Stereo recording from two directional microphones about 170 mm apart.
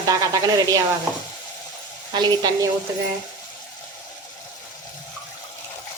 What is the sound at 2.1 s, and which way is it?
Speech, 25° right (ahead or behind).